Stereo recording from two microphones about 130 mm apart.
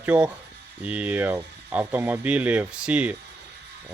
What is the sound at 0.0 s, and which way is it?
Speech, 10° right (ahead or behind).